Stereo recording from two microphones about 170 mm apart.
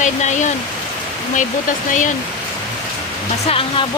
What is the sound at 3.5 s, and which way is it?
Speech, 30° left (ahead or behind).